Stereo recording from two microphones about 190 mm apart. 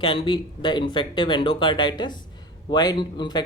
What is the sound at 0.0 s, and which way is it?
Speech, 25° left (ahead or behind).